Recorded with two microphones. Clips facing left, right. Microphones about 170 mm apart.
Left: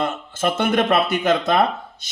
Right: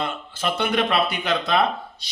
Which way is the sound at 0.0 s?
45° left (ahead or behind).